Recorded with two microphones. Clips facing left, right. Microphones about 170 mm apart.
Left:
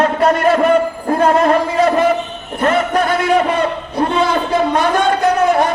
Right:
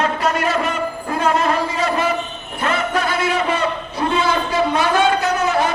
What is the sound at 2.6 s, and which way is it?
Speech, 50° left (ahead or behind).